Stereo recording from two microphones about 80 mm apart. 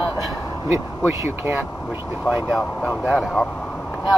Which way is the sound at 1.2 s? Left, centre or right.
Right.